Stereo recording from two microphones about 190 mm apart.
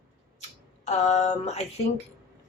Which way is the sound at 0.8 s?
35° left (ahead or behind).